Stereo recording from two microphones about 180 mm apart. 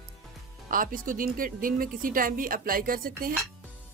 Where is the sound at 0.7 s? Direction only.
50° right (ahead or behind).